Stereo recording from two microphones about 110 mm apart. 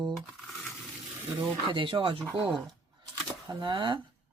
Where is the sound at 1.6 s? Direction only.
50° right (ahead or behind).